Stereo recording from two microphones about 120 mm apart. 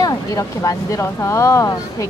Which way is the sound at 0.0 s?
30° left (ahead or behind).